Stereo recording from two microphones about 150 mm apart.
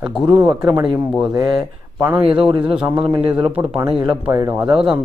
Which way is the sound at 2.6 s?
5° right (ahead or behind).